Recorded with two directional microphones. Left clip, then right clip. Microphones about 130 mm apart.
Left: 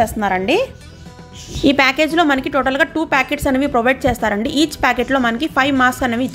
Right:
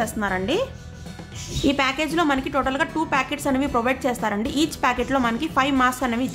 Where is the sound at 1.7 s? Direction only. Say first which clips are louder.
Left 8 dB; 45° left (ahead or behind).